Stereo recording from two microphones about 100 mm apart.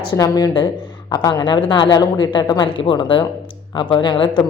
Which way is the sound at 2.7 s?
60° left (ahead or behind).